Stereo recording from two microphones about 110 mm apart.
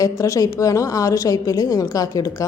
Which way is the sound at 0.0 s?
30° left (ahead or behind).